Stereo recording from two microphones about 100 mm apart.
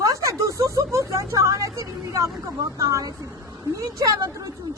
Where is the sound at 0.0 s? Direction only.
35° right (ahead or behind).